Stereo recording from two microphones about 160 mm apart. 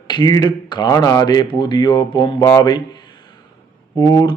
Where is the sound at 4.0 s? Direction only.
25° left (ahead or behind).